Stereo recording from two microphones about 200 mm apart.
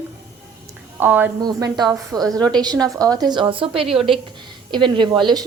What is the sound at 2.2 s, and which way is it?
Speech, 5° left (ahead or behind).